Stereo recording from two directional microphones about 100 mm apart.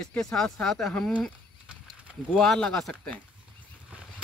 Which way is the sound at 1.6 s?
10° right (ahead or behind).